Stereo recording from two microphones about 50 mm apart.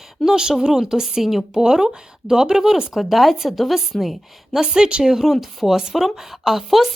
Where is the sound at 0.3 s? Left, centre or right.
Centre.